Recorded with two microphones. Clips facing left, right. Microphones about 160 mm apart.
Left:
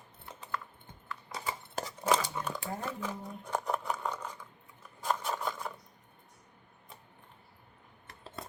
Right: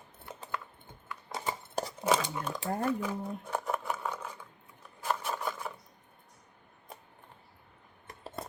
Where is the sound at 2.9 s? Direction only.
10° right (ahead or behind).